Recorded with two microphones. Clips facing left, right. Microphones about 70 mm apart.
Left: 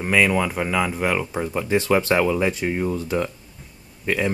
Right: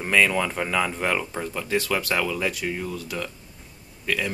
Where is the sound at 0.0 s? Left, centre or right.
Centre.